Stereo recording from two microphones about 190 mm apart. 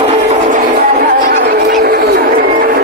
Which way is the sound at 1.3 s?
50° right (ahead or behind).